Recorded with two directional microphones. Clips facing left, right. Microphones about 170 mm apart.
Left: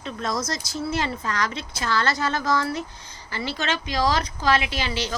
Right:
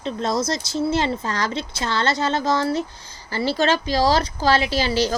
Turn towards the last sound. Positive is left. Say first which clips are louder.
# right 7 dB
turn(degrees=-35)  # may be behind; listen again after turning